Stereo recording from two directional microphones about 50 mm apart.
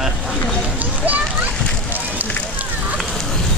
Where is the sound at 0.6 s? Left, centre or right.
Right.